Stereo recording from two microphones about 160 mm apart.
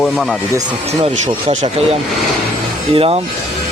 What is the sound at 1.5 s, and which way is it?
Speech, 45° right (ahead or behind).